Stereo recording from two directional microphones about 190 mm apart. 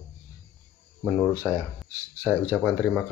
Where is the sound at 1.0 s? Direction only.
Centre (ahead or behind).